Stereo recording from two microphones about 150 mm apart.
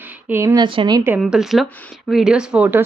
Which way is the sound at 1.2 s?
Centre (ahead or behind).